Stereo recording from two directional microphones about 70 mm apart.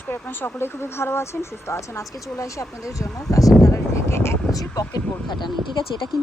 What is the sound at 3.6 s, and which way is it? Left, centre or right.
Speech, left.